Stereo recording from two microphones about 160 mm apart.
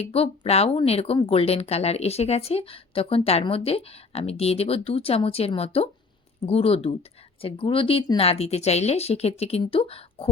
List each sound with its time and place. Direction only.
0.0 s speech: 40° left (ahead or behind)